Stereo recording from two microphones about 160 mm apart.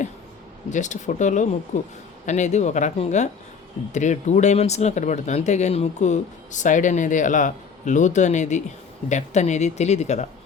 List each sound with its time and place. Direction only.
0.7 s speech: 50° left (ahead or behind)